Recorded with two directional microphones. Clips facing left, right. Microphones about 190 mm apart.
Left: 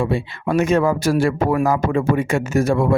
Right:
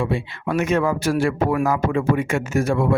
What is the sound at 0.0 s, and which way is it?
Speech, 40° left (ahead or behind).